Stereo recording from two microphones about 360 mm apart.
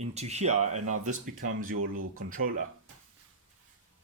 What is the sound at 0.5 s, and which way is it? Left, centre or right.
Speech, right.